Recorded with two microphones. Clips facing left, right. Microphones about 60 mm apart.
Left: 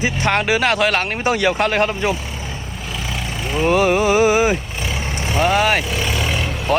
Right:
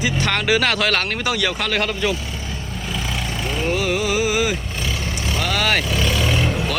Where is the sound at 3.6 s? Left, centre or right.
Left.